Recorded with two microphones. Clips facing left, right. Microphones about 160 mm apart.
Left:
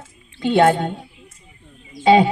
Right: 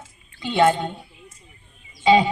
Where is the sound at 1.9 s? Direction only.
55° left (ahead or behind).